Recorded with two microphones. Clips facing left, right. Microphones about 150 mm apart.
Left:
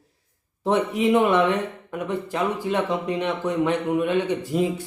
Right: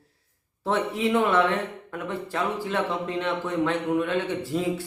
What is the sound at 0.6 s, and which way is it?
Speech, 15° left (ahead or behind).